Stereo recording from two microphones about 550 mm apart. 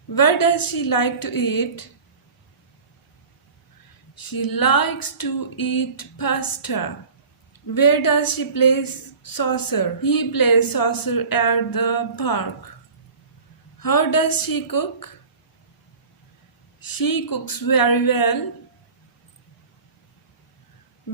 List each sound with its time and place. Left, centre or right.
0.1 s speech: left
4.1 s speech: left
13.7 s speech: left
16.8 s speech: left